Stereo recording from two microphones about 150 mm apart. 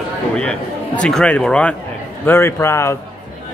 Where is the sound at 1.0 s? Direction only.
5° left (ahead or behind).